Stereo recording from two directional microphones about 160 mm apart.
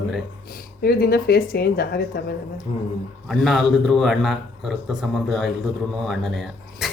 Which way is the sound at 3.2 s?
Centre (ahead or behind).